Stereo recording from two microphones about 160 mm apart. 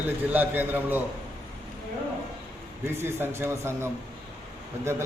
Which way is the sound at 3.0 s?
15° right (ahead or behind).